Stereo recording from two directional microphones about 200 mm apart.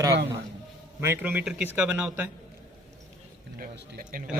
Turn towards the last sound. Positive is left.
turn(degrees=-45)  # may be behind; listen again after turning